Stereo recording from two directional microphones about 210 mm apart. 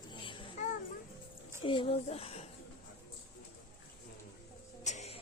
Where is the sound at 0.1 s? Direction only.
25° left (ahead or behind).